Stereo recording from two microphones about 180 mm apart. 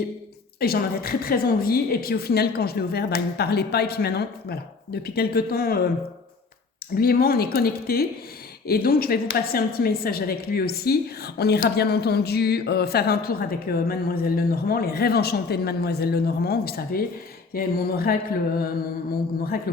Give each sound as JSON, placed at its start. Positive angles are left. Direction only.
{"t": 0.6, "sound": "a woman's voice", "side_deg": 60}
{"t": 6.9, "sound": "a woman's voice", "side_deg": 55}